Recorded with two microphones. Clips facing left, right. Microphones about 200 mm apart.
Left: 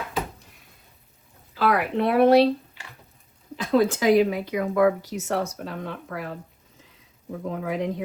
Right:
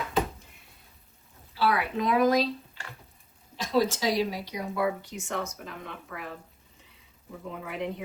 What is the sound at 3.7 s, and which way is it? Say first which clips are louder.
Speech: left 7 dB; 55° left (ahead or behind).